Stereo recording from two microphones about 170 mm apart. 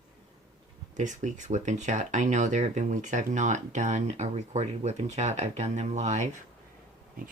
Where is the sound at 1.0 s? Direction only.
45° right (ahead or behind).